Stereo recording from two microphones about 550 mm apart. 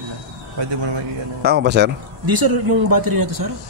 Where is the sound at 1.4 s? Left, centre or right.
Centre.